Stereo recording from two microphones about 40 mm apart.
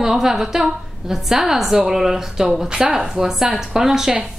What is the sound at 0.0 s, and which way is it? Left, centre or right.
A woman's voice, centre.